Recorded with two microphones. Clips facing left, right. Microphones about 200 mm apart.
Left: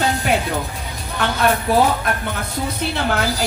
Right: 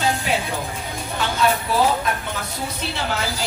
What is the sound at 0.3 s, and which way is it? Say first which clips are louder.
Speech: left 7 dB; 55° left (ahead or behind).